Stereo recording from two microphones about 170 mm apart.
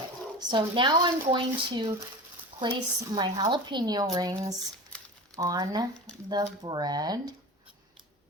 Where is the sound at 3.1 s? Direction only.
25° right (ahead or behind).